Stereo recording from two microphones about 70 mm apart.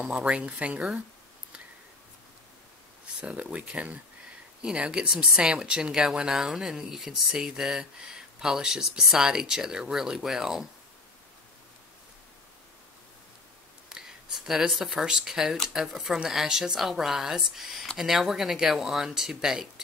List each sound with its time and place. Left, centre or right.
0.0 s speech: centre
3.2 s speech: centre
13.8 s speech: centre